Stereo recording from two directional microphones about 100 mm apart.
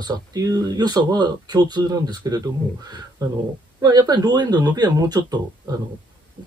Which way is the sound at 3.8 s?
40° right (ahead or behind).